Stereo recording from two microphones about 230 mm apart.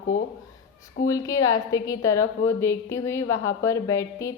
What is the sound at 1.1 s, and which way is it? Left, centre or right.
A woman's voice, centre.